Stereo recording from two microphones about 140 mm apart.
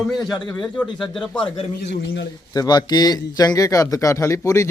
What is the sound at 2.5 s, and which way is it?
A man's voice, 30° left (ahead or behind).